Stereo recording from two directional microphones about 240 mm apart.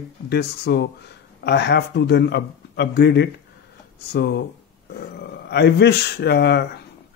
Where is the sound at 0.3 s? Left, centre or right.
Left.